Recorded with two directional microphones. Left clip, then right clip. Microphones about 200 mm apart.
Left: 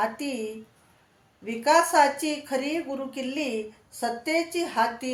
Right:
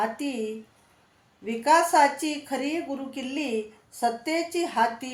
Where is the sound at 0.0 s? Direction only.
5° left (ahead or behind).